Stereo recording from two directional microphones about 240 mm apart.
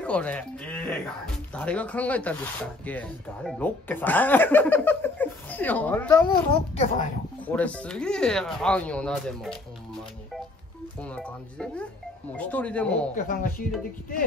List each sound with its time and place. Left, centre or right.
0.0 s speech: centre
7.4 s speech: centre
11.0 s speech: centre
13.1 s speech: left